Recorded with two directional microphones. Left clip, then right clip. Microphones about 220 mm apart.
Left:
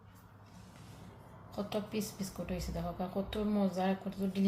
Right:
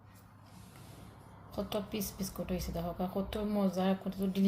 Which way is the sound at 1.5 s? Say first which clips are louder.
Right 1 dB; 30° right (ahead or behind).